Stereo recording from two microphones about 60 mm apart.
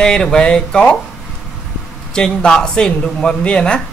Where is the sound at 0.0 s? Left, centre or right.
Centre.